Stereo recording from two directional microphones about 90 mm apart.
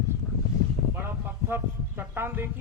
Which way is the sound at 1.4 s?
25° right (ahead or behind).